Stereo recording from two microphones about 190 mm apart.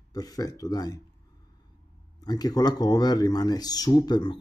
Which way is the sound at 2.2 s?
20° left (ahead or behind).